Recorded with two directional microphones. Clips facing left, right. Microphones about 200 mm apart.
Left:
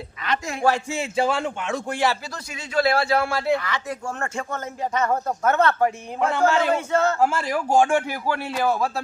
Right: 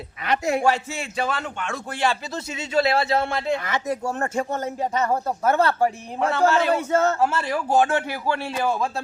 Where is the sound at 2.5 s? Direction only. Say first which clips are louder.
Even; 25° right (ahead or behind).